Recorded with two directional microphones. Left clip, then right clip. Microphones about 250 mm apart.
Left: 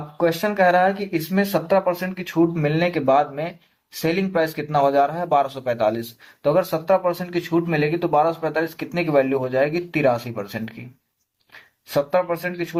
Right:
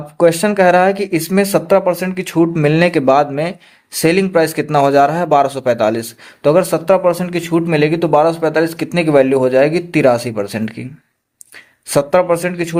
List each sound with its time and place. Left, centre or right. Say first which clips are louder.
0.2 s a man's voice: right 7 dB; right
11.9 s a man's voice: right 8 dB; right